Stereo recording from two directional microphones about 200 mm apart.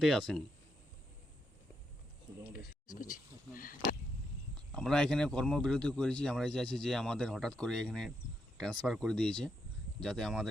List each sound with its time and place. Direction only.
0.0 s speech: centre (ahead or behind)
2.9 s a sound: 40° left (ahead or behind)
4.5 s speech: 5° left (ahead or behind)